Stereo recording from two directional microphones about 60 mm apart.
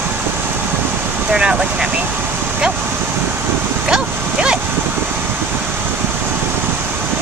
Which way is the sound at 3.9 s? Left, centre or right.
Centre.